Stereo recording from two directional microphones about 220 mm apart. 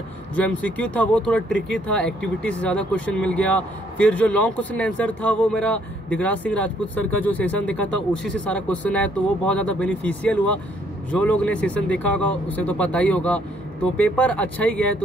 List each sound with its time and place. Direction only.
0.4 s speech: 5° left (ahead or behind)